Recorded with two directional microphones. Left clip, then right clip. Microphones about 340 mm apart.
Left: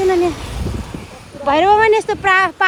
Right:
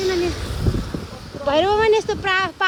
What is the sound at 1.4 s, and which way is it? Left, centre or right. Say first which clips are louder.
Speech: left 5 dB; centre.